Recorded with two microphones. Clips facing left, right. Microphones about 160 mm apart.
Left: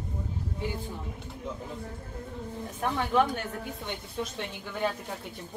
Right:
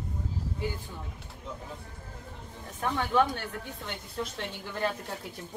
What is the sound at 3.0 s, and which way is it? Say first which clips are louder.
Speech: even; 20° left (ahead or behind).